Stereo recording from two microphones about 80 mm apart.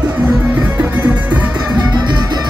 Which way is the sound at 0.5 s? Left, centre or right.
Centre.